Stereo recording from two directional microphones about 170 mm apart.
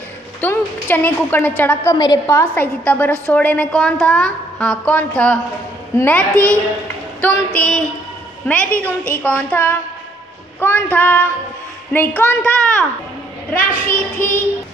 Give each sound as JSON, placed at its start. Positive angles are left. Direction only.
{"t": 0.4, "sound": "a woman's voice", "side_deg": 10}
{"t": 2.5, "sound": "a woman's voice", "side_deg": 10}
{"t": 7.2, "sound": "a sound", "side_deg": 5}
{"t": 8.5, "sound": "a woman's voice", "side_deg": 10}